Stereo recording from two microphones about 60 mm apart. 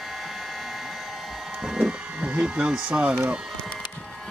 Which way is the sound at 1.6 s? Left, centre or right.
Centre.